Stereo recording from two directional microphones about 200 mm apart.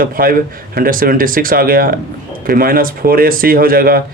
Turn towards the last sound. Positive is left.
turn(degrees=-45)  # may be behind; listen again after turning